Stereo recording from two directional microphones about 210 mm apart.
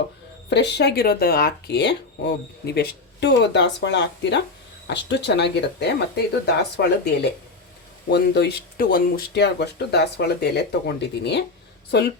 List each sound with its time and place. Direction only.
0.5 s speech: 55° left (ahead or behind)